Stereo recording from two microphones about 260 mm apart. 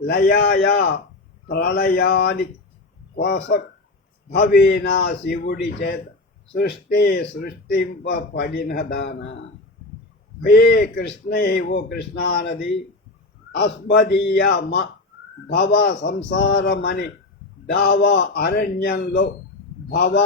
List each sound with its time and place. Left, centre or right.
0.0 s a man's voice: left
10.4 s a man's voice: left